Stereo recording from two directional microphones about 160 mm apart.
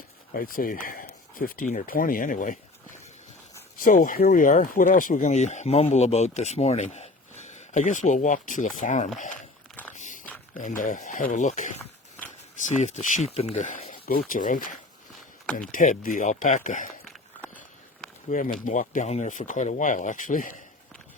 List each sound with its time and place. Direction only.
0.3 s speech: 60° left (ahead or behind)
9.9 s a sound: 50° left (ahead or behind)
10.5 s speech: 55° left (ahead or behind)
11.8 s walk: 10° left (ahead or behind)
12.8 s speech: 50° left (ahead or behind)
14.0 s speech: 65° left (ahead or behind)
17.1 s walk: 10° left (ahead or behind)
18.3 s speech: 55° left (ahead or behind)